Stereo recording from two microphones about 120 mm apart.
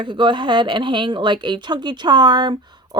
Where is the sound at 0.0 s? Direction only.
40° right (ahead or behind).